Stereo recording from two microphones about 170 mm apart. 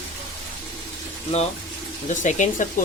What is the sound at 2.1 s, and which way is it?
Speech, 45° left (ahead or behind).